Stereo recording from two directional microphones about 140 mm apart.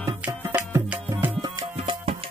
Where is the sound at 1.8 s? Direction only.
45° right (ahead or behind).